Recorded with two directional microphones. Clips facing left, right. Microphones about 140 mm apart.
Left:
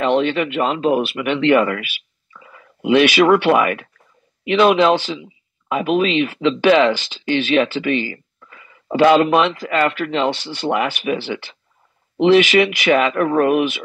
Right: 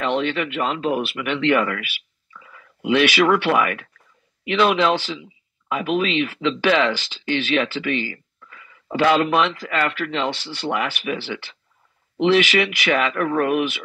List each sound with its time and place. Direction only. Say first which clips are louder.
0.0 s speech: left 5 dB; 20° left (ahead or behind)
8.4 s a sound: left 2 dB; 30° left (ahead or behind)
8.9 s speech: left 5 dB; 20° left (ahead or behind)